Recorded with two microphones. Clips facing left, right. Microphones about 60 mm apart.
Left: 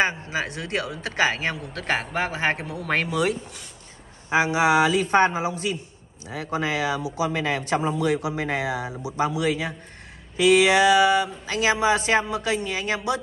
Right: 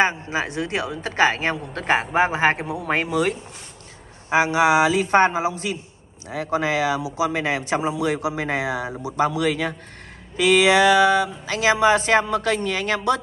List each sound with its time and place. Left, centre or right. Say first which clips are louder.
0.0 s a woman's voice: right 3 dB; right
2.0 s a woman's voice: right 6 dB; centre
3.1 s a woman's voice: right 2 dB; right
9.4 s speech: right 2 dB; right